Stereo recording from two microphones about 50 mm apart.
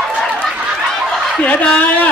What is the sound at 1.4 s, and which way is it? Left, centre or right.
Speech, left.